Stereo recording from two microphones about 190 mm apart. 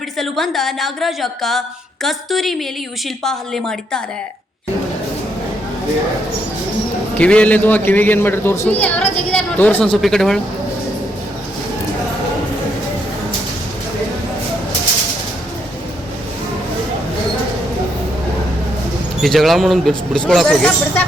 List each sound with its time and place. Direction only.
0.2 s a woman's voice: centre (ahead or behind)
7.2 s a man's voice: 5° left (ahead or behind)
19.2 s a woman's voice: centre (ahead or behind)